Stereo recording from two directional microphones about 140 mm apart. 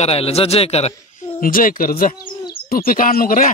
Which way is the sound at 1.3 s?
85° left.